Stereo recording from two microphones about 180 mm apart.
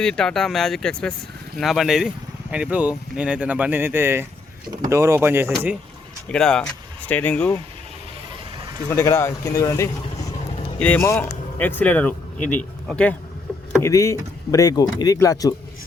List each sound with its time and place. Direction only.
0.0 s speech: 5° left (ahead or behind); by 5.5 s 15° right (ahead or behind)
6.2 s speech: 5° left (ahead or behind)
8.9 s speech: 15° left (ahead or behind)
13.5 s rowboat: 5° left (ahead or behind)
13.8 s speech: 15° left (ahead or behind)